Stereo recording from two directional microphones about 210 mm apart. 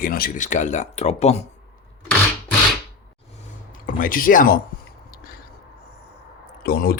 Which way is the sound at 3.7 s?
40° left (ahead or behind).